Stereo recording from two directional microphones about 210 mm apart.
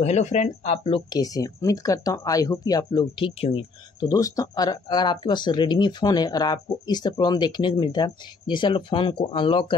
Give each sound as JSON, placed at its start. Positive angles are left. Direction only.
{"t": 0.0, "sound": "speech", "side_deg": 30}